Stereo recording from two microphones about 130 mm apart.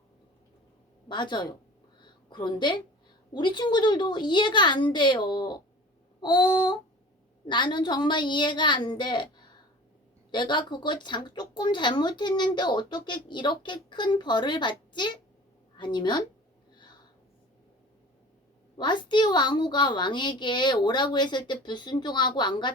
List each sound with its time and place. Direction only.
1.0 s a woman's voice: 35° left (ahead or behind)
16.7 s a sound: 35° left (ahead or behind)
18.8 s speech: 35° left (ahead or behind)